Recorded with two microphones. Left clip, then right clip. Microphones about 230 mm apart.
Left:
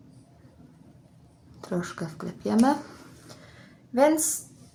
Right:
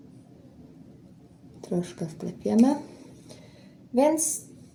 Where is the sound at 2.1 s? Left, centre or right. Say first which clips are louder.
Right 2 dB; left.